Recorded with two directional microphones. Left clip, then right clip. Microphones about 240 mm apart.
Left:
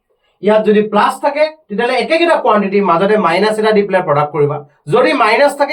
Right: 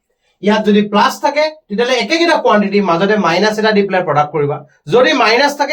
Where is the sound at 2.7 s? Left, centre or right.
Right.